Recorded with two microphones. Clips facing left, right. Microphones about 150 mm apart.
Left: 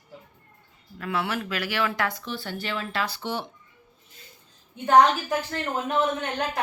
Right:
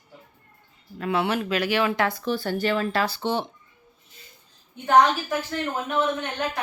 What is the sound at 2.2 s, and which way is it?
Speech, 45° right (ahead or behind).